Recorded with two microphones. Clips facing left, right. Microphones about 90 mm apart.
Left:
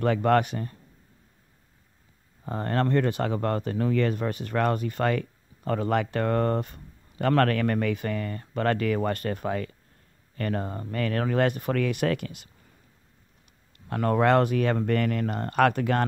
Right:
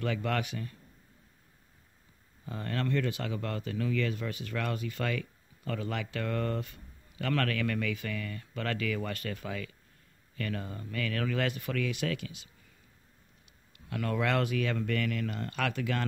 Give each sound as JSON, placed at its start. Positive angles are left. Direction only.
{"t": 0.0, "sound": "speech", "side_deg": 45}
{"t": 2.4, "sound": "speech", "side_deg": 45}
{"t": 13.7, "sound": "speech", "side_deg": 40}